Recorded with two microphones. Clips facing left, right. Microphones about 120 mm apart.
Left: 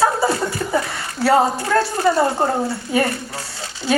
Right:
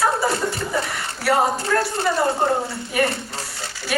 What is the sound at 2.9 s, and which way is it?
A woman's voice, 25° left (ahead or behind).